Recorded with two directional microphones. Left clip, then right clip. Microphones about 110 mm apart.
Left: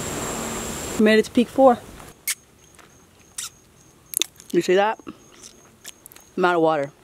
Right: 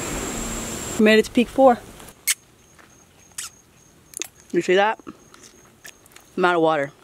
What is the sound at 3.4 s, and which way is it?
Rodents, 10° left (ahead or behind).